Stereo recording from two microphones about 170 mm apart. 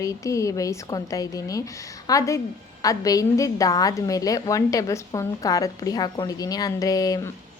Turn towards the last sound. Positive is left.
turn(degrees=20)  # may be behind; listen again after turning